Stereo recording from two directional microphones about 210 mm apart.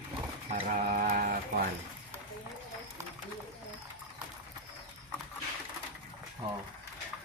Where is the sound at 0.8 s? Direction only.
40° right (ahead or behind).